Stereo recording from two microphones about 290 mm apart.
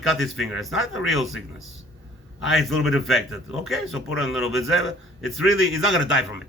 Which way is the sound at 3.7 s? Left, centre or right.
Left.